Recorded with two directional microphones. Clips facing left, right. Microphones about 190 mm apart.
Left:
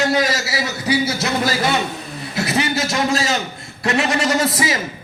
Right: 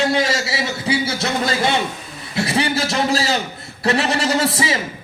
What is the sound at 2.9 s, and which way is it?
A man's voice, 30° right (ahead or behind).